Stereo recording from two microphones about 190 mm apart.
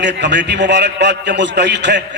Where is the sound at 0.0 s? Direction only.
65° right (ahead or behind).